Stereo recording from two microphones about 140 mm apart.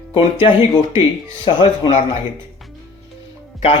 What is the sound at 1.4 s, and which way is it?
Speech, 45° left (ahead or behind).